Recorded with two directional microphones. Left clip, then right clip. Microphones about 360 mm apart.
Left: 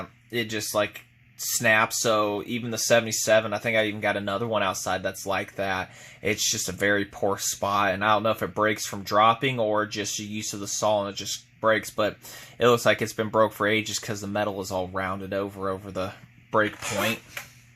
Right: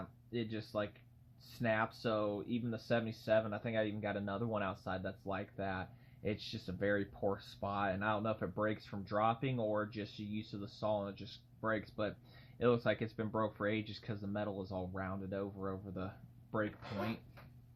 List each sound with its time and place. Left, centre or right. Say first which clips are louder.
0.3 s speech: left 14 dB; left